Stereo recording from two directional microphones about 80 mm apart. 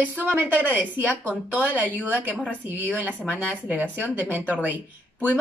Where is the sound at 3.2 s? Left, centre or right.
Centre.